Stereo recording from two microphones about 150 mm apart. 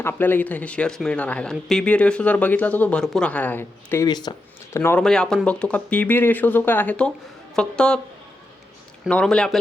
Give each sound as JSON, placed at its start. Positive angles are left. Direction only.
{"t": 0.0, "sound": "speech", "side_deg": 10}
{"t": 4.0, "sound": "speech", "side_deg": 30}
{"t": 4.8, "sound": "a woman's voice", "side_deg": 10}
{"t": 9.0, "sound": "a woman's voice", "side_deg": 5}